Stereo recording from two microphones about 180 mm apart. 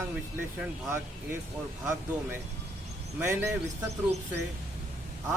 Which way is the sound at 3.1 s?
15° right (ahead or behind).